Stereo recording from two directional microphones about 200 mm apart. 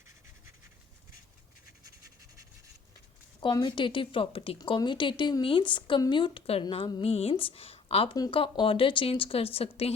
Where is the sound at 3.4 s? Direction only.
25° left (ahead or behind).